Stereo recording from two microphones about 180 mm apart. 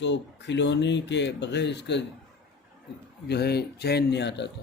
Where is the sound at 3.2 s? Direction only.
65° left (ahead or behind).